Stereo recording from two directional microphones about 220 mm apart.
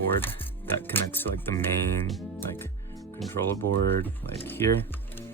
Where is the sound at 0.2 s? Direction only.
10° left (ahead or behind).